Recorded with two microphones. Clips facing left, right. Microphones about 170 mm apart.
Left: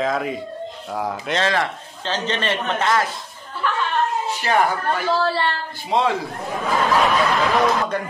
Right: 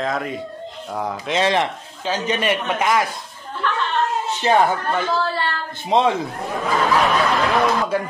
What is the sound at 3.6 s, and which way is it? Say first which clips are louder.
Chuckle: even; 10° left (ahead or behind).